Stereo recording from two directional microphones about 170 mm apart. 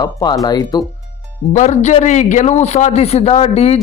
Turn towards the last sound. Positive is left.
turn(degrees=40)  # may be behind; listen again after turning